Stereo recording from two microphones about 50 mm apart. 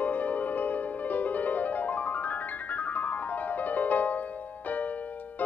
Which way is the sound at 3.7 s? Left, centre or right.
Left.